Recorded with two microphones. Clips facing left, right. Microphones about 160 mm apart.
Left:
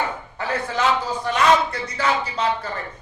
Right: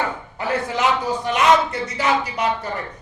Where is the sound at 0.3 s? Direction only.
15° right (ahead or behind).